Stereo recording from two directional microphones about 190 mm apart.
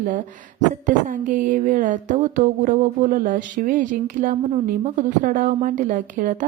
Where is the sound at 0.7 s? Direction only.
45° right (ahead or behind).